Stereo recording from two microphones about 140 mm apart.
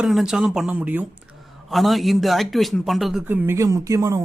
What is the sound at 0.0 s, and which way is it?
A man's voice, 5° right (ahead or behind).